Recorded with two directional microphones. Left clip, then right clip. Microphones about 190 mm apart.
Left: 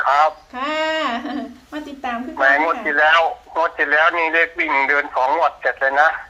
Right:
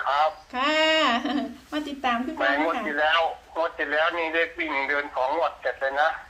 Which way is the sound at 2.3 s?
55° left (ahead or behind).